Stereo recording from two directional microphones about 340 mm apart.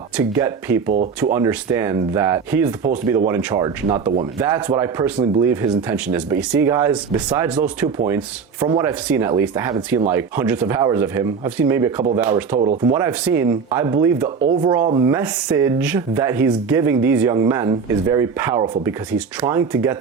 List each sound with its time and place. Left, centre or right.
0.2 s speech: centre
12.5 s speech: centre
12.9 s speech: centre